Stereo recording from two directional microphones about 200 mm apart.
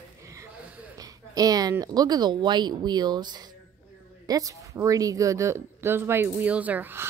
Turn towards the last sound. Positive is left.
turn(degrees=-10)  # may be behind; listen again after turning